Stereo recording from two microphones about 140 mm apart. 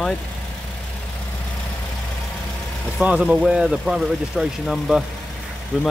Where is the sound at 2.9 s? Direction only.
10° right (ahead or behind).